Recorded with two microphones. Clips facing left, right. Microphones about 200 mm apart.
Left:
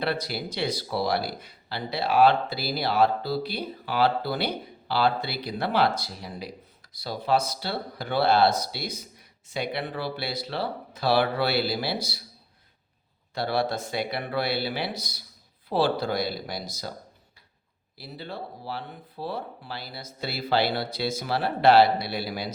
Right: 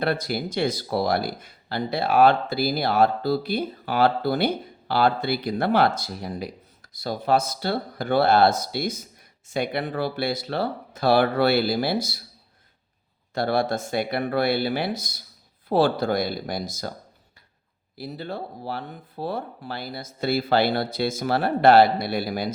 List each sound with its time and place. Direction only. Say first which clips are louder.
0.0 s speech: right 4 dB; 50° right (ahead or behind)
13.3 s speech: right 3 dB; 50° right (ahead or behind)
17.9 s speech: right 5 dB; 50° right (ahead or behind)